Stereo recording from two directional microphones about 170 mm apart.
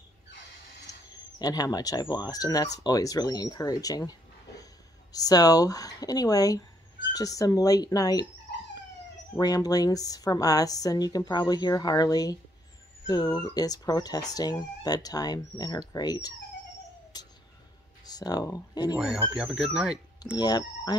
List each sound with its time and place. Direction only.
1.1 s a woman's voice: 25° left (ahead or behind)
9.3 s a woman's voice: 20° left (ahead or behind)
17.1 s music: 25° left (ahead or behind)
18.0 s speech: 25° left (ahead or behind)
18.9 s speech: 5° right (ahead or behind)
20.3 s a woman's voice: 25° left (ahead or behind)